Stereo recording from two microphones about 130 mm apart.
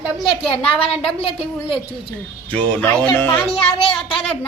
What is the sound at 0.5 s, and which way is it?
Speech, 50° left (ahead or behind).